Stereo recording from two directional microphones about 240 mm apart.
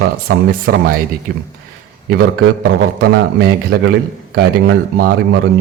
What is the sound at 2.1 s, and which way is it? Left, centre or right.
A man's voice, right.